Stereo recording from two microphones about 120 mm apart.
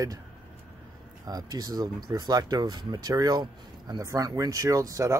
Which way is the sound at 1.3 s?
30° right (ahead or behind).